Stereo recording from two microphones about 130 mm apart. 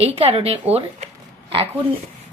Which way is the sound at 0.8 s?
45° right (ahead or behind).